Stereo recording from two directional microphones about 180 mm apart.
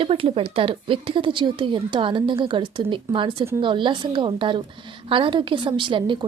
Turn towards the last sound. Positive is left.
turn(degrees=-25)  # may be behind; listen again after turning